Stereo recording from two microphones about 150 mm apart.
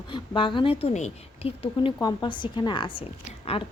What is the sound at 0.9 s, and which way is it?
A woman's voice, 45° left (ahead or behind).